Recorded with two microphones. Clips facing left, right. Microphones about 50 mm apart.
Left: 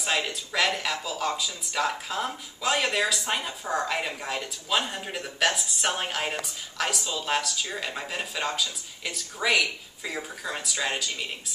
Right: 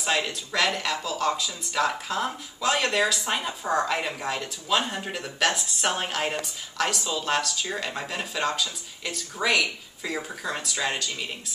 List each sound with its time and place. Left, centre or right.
0.0 s speech: centre